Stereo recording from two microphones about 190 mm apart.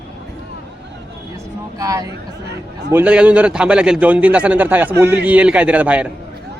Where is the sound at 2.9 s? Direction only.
5° right (ahead or behind).